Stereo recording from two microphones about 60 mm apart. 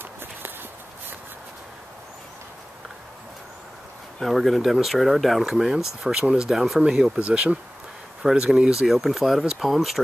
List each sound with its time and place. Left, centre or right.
0.2 s walk: right
4.2 s speech: centre
6.8 s speech: centre
8.8 s speech: centre